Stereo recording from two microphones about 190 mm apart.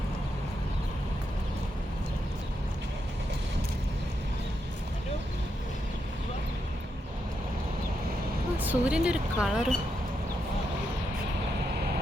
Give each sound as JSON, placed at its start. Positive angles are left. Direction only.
{"t": 8.5, "sound": "speech", "side_deg": -10}